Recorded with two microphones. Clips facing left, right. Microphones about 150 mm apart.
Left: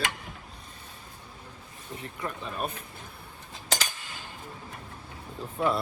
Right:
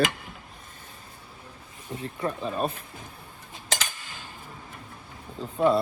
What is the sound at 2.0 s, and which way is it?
Speech, 30° right (ahead or behind).